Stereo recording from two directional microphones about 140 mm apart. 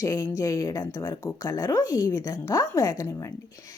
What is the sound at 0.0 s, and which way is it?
Speech, 25° left (ahead or behind).